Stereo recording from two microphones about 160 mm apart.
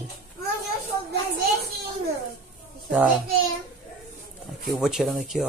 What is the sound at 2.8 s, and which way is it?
Speech, centre (ahead or behind).